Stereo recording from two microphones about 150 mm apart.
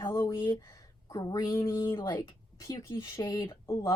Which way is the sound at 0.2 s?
20° left (ahead or behind).